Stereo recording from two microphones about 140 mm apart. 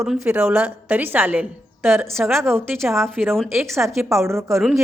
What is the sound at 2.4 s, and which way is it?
Speech, 15° right (ahead or behind).